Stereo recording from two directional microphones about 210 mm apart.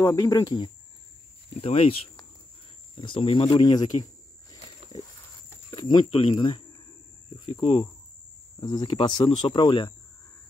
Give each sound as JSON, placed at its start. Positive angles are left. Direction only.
{"t": 0.0, "sound": "speech", "side_deg": 15}
{"t": 3.0, "sound": "snake", "side_deg": 25}
{"t": 5.7, "sound": "speech", "side_deg": 20}